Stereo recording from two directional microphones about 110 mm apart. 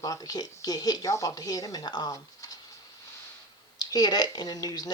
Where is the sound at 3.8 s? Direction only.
40° left (ahead or behind).